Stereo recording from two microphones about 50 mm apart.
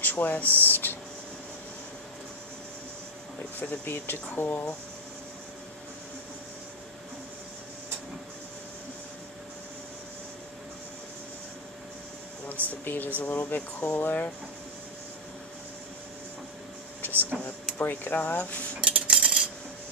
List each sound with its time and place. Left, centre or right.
0.0 s speech: left
0.7 s a sound: left
3.5 s speech: left
12.6 s speech: left
13.6 s speech: left
13.9 s speech: left
17.1 s speech: right
17.7 s speech: left
18.8 s cutlery: right
19.1 s cutlery: centre